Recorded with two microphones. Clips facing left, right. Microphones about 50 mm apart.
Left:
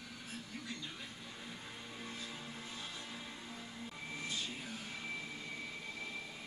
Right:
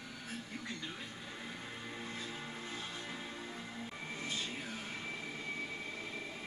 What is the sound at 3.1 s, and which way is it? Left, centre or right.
Music, right.